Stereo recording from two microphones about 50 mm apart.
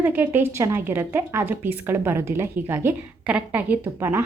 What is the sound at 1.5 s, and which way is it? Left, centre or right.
Speech, right.